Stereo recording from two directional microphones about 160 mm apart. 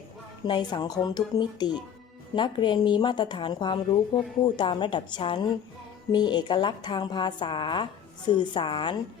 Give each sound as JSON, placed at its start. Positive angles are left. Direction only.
{"t": 0.4, "sound": "a woman's voice", "side_deg": 30}